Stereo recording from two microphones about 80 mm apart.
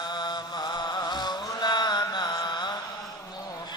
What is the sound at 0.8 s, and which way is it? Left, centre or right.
Mantra, left.